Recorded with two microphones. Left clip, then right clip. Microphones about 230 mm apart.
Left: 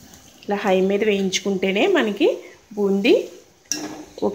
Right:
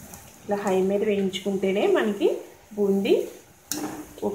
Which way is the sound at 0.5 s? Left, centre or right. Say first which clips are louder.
Left 4 dB; left.